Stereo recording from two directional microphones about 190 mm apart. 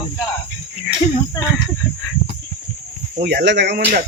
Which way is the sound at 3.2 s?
60° right (ahead or behind).